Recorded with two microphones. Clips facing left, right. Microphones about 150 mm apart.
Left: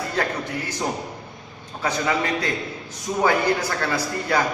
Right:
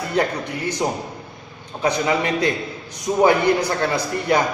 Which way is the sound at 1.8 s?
20° right (ahead or behind).